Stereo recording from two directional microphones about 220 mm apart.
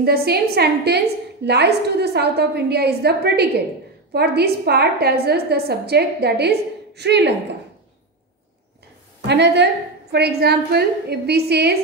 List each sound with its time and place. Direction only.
0.0 s a woman's voice: 45° right (ahead or behind)
9.3 s a woman's voice: 50° right (ahead or behind)